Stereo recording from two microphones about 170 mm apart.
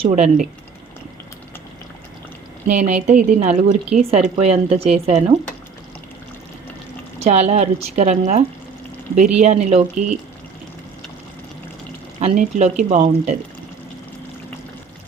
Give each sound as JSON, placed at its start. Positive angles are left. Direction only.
{"t": 0.0, "sound": "speech", "side_deg": -40}
{"t": 2.6, "sound": "a woman's voice", "side_deg": -45}
{"t": 7.2, "sound": "a woman's voice", "side_deg": -40}
{"t": 12.2, "sound": "a woman's voice", "side_deg": -45}